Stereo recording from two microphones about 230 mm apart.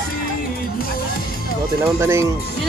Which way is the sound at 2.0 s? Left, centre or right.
Centre.